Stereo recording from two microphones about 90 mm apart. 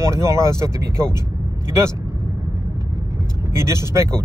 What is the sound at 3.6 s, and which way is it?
Speech, 30° right (ahead or behind).